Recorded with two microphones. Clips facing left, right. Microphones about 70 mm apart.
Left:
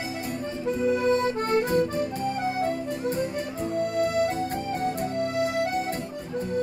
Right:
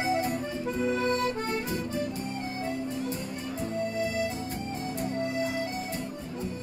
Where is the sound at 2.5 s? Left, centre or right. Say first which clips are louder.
Left 5 dB; left.